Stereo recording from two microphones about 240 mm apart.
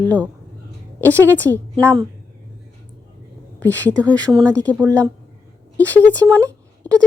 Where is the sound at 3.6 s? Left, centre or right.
Centre.